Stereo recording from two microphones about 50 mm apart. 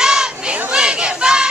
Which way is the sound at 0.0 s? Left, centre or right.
Centre.